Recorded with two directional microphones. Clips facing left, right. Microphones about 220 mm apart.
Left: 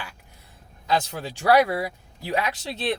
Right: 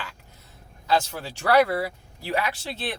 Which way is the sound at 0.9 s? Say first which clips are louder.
Right 1 dB; 15° left (ahead or behind).